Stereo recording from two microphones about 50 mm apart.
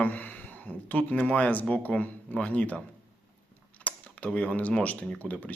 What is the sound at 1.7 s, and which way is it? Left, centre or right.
Speech, left.